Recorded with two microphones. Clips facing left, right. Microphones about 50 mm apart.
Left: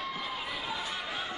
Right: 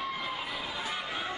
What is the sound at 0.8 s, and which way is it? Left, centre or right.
Crowd, centre.